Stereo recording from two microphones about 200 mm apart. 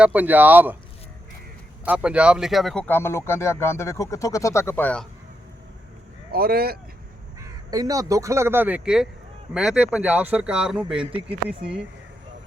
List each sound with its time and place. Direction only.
0.0 s speech: 10° right (ahead or behind)
1.8 s speech: 5° right (ahead or behind)
6.3 s speech: 50° right (ahead or behind)
7.3 s speech: 20° right (ahead or behind)